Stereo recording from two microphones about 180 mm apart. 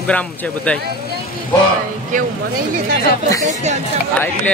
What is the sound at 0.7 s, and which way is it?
Speech, 5° left (ahead or behind).